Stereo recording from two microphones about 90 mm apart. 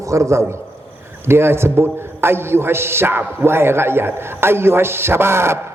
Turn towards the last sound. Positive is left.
turn(degrees=-30)  # may be behind; listen again after turning